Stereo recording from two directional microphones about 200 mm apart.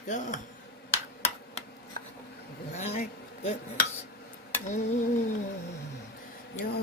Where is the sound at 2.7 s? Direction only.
35° left (ahead or behind).